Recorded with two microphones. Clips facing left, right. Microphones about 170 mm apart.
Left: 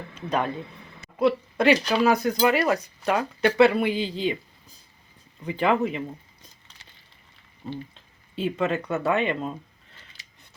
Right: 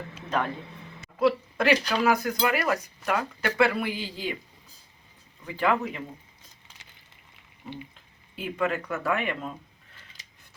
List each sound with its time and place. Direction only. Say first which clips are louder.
0.3 s speech: left 3 dB; 20° left (ahead or behind)
5.5 s speech: left 3 dB; 20° left (ahead or behind)
8.4 s speech: left 3 dB; 25° left (ahead or behind)